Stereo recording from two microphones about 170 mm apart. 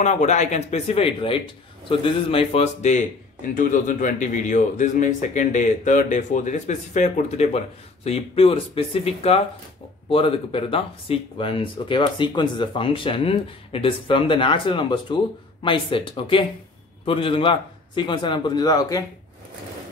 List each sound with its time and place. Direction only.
0.0 s a man's voice: 45° left (ahead or behind); by 19.0 s 20° left (ahead or behind)